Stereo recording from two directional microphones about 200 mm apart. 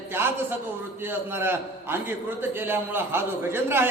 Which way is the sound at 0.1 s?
10° right (ahead or behind).